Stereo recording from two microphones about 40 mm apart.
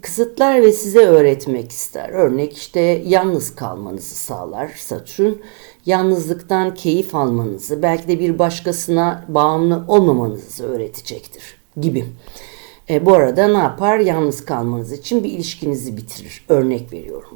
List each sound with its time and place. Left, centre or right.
0.0 s a woman's voice: centre
13.1 s a woman's voice: centre
14.3 s a woman's voice: right
14.5 s a woman's voice: centre